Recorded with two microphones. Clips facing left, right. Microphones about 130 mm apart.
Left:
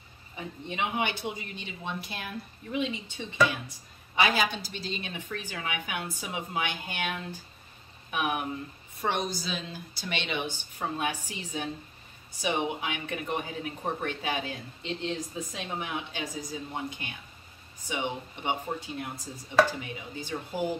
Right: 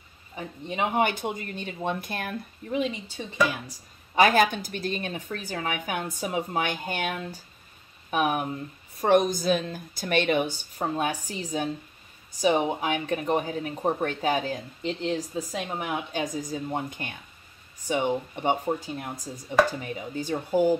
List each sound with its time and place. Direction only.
0.4 s speech: 40° right (ahead or behind)
2.6 s speech: 40° right (ahead or behind)